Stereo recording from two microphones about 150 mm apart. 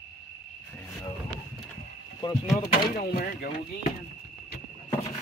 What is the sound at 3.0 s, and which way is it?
Speech, 70° left (ahead or behind).